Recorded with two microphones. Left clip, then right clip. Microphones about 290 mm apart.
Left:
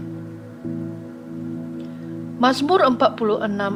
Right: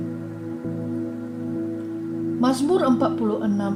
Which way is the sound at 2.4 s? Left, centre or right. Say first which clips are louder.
Left 5 dB; left.